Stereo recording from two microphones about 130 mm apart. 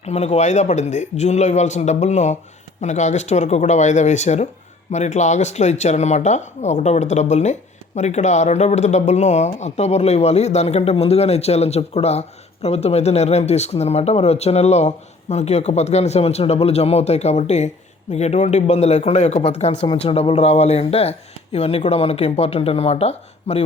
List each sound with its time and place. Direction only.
0.0 s speech: 55° left (ahead or behind)